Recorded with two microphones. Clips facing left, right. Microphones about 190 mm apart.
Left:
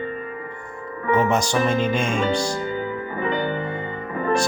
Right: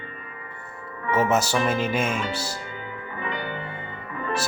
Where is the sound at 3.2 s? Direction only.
35° left (ahead or behind).